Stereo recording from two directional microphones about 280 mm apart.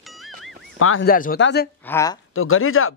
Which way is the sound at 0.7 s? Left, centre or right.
Left.